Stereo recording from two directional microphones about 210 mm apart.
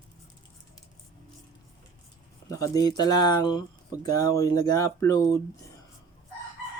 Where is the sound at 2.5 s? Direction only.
15° left (ahead or behind).